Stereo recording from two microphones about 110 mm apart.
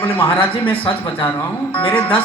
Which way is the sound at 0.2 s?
15° left (ahead or behind).